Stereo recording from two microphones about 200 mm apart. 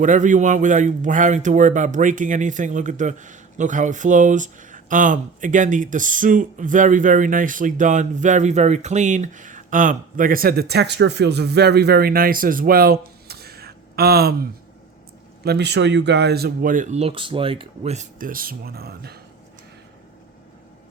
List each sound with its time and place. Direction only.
0.0 s a man's voice: 40° right (ahead or behind)
15.4 s speech: 55° right (ahead or behind)